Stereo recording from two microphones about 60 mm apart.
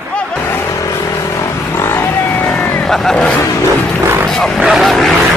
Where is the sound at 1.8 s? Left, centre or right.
Left.